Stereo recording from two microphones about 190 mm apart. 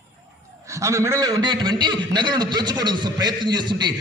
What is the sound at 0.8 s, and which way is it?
A man's voice, 15° right (ahead or behind).